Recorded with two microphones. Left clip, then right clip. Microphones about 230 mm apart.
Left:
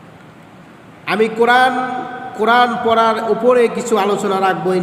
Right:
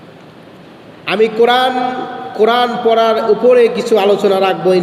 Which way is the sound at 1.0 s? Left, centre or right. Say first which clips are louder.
Right 3 dB; centre.